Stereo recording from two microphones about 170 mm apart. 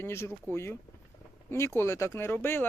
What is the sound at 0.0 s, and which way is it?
Speech, 15° left (ahead or behind).